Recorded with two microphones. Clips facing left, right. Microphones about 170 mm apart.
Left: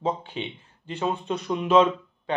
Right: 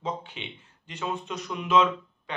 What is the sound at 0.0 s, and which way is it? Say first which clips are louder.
Speech: left 6 dB; 35° left (ahead or behind).